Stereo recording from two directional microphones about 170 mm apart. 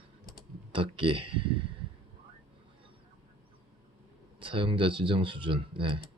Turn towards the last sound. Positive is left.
turn(degrees=-30)  # may be behind; listen again after turning